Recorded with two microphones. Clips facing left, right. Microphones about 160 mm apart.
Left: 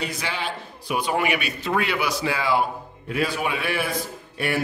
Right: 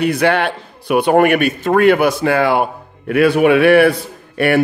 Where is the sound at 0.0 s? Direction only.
60° right (ahead or behind).